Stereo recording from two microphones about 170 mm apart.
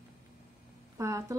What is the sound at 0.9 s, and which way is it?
Speech, 20° right (ahead or behind).